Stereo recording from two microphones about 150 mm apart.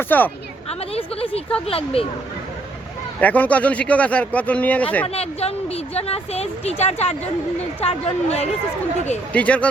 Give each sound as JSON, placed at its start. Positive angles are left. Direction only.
{"t": 0.1, "sound": "a man's voice", "side_deg": 10}
{"t": 0.7, "sound": "a woman's voice", "side_deg": 40}
{"t": 3.2, "sound": "a man's voice", "side_deg": 10}
{"t": 5.0, "sound": "speech", "side_deg": 45}
{"t": 9.3, "sound": "a man's voice", "side_deg": 10}